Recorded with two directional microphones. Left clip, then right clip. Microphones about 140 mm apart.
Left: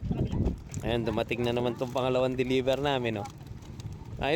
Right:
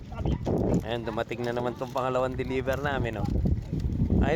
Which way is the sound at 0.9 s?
70° left (ahead or behind).